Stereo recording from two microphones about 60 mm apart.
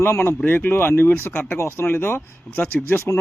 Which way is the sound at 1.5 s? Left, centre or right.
Left.